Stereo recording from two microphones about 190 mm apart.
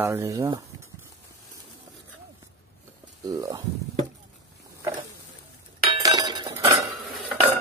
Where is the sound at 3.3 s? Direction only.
20° right (ahead or behind).